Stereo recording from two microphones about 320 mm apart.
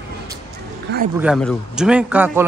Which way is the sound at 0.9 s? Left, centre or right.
Right.